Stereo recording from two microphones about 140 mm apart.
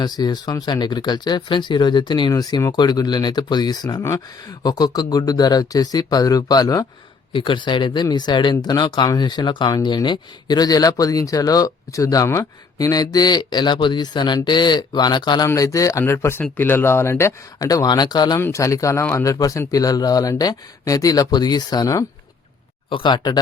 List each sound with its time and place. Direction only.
0.0 s speech: 30° left (ahead or behind)